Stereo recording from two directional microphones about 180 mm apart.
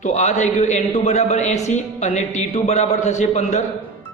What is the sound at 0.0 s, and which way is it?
A man's voice, 40° left (ahead or behind).